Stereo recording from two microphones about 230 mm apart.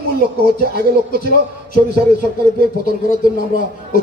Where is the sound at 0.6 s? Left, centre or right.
Right.